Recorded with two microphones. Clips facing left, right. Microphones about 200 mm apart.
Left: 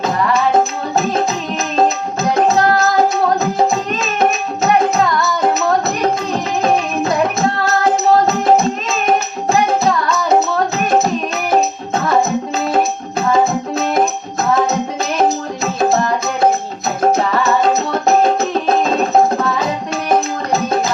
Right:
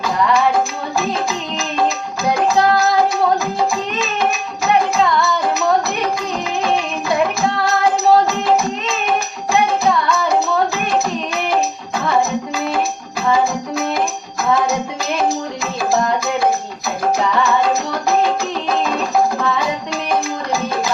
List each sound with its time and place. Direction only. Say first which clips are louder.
0.0 s music: even; 25° left (ahead or behind)
2.3 s music: left 1 dB; 25° left (ahead or behind)
6.7 s music: left 2 dB; 25° left (ahead or behind)
11.5 s music: left 7 dB; 25° left (ahead or behind)
15.8 s music: left 2 dB; 25° left (ahead or behind)